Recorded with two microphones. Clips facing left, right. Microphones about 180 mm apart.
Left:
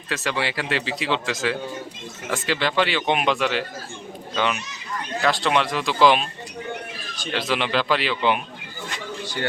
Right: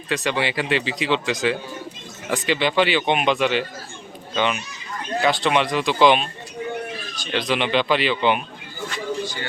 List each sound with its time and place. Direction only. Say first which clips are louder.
0.1 s speech: right 3 dB; centre (ahead or behind)
7.3 s speech: right 2 dB; centre (ahead or behind)
9.2 s speech: left 3 dB; 70° left (ahead or behind)